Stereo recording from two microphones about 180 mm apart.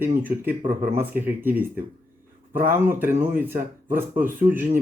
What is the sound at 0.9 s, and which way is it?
Speech, 10° right (ahead or behind).